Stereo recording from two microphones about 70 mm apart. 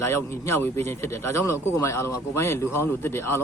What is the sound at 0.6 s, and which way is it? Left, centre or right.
Speech, left.